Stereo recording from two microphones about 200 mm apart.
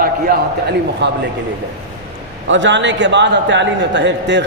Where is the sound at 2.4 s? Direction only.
70° right (ahead or behind).